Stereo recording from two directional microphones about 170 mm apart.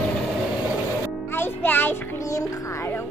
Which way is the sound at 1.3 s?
10° left (ahead or behind).